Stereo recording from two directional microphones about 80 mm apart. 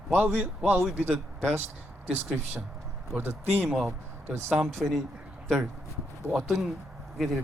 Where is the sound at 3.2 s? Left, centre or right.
Right.